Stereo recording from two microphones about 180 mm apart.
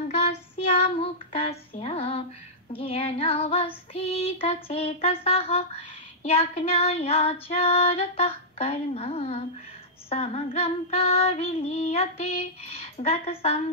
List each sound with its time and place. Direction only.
0.1 s child singing: 35° left (ahead or behind)
1.3 s female singing: 35° left (ahead or behind)